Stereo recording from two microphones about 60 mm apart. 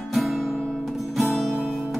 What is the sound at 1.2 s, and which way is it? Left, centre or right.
Music, centre.